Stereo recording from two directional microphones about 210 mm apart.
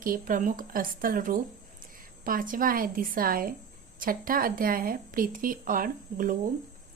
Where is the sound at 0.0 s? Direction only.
40° right (ahead or behind).